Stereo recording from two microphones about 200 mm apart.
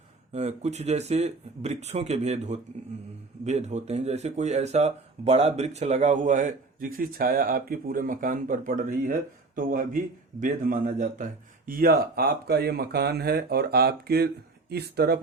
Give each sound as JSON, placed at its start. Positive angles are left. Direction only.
{"t": 0.3, "sound": "a man's voice", "side_deg": -35}